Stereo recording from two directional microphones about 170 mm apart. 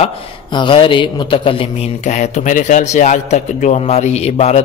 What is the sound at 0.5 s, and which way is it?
A man's voice, 30° left (ahead or behind).